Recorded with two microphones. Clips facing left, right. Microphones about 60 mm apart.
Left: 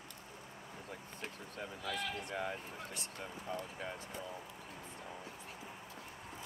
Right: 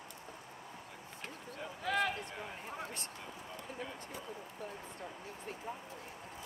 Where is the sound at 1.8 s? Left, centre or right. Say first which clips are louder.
Right 8 dB; right.